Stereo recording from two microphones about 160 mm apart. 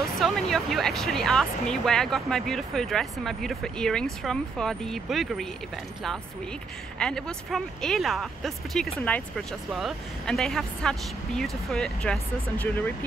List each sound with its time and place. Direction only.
0.2 s speech: centre (ahead or behind)
7.0 s speech: 5° left (ahead or behind)